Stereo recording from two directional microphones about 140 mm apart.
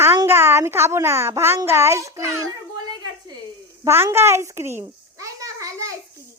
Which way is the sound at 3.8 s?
15° right (ahead or behind).